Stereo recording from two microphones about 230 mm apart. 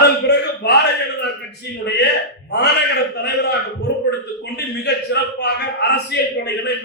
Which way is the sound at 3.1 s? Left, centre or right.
Left.